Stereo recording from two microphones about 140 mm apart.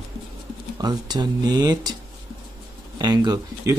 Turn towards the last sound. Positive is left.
turn(degrees=-30)  # may be behind; listen again after turning